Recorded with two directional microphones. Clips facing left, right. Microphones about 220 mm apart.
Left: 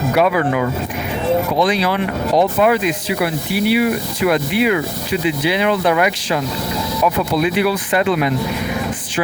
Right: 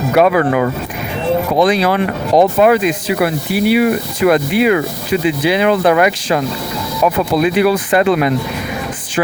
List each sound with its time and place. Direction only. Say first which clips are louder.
0.2 s speech: right 5 dB; 50° right (ahead or behind)